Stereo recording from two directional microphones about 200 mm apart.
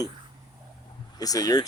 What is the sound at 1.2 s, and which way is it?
Speech, 20° left (ahead or behind).